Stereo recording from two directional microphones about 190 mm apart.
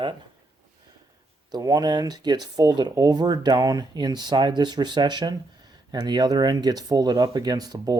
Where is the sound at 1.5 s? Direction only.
20° right (ahead or behind).